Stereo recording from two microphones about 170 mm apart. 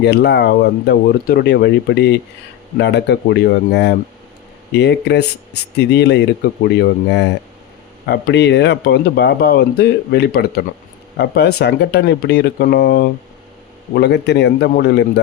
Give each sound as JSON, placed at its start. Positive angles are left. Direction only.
{"t": 0.0, "sound": "speech", "side_deg": 75}
{"t": 5.7, "sound": "speech", "side_deg": 70}
{"t": 13.9, "sound": "speech", "side_deg": 80}